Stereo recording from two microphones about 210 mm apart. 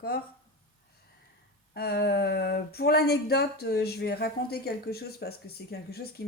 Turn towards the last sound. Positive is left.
turn(degrees=50)  # may be behind; listen again after turning